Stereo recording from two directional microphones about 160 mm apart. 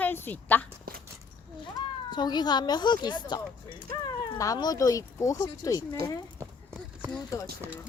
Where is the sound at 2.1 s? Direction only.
25° left (ahead or behind).